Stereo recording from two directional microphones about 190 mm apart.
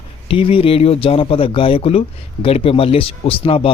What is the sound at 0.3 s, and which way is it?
Speech, 30° left (ahead or behind).